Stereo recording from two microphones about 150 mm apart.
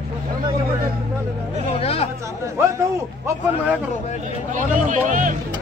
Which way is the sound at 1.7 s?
40° left (ahead or behind).